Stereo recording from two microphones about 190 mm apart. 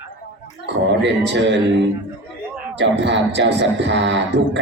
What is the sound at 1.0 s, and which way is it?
Speech, 65° right (ahead or behind).